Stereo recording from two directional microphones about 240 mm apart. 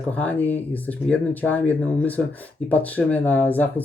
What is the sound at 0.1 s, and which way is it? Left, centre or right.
Speech, centre.